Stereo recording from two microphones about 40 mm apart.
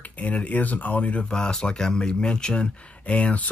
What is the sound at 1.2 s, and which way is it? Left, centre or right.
Speech, left.